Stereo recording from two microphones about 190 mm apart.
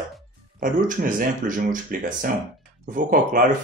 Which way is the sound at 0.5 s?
45° right (ahead or behind).